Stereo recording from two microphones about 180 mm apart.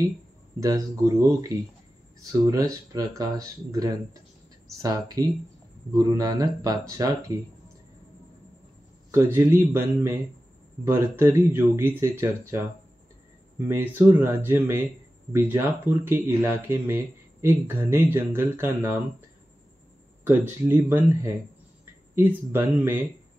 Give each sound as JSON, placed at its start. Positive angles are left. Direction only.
{"t": 0.6, "sound": "speech", "side_deg": -20}
{"t": 9.1, "sound": "speech", "side_deg": -15}
{"t": 13.7, "sound": "speech", "side_deg": -15}
{"t": 20.2, "sound": "speech", "side_deg": -10}